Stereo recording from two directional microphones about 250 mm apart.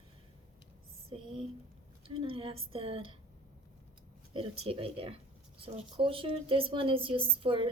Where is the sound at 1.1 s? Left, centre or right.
Right.